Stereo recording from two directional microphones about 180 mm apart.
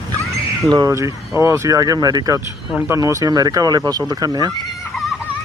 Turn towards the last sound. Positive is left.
turn(degrees=-5)  # may be behind; listen again after turning